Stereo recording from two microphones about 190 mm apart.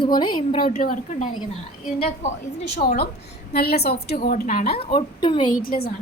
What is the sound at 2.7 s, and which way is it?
A woman's voice, 55° left (ahead or behind).